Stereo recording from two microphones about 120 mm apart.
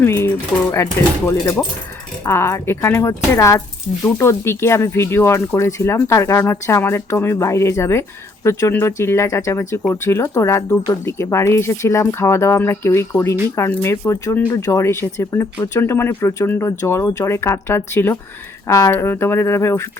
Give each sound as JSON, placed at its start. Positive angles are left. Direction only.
{"t": 0.0, "sound": "speech", "side_deg": 20}
{"t": 2.2, "sound": "speech", "side_deg": 20}